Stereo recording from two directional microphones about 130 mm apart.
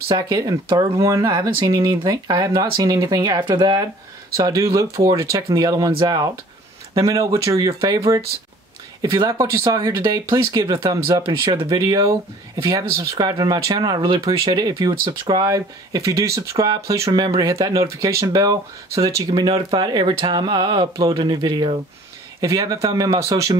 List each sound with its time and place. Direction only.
0.1 s speech: 30° right (ahead or behind)
19.4 s speech: 40° right (ahead or behind); by 23.5 s 25° right (ahead or behind)